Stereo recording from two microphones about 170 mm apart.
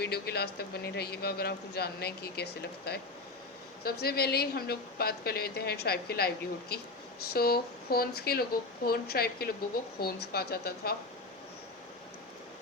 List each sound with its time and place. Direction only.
0.0 s speech: 70° left (ahead or behind)